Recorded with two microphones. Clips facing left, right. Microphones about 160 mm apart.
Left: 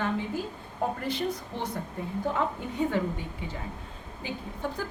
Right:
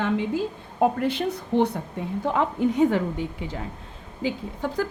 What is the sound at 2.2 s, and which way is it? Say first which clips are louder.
Speech: right 8 dB; 90° right.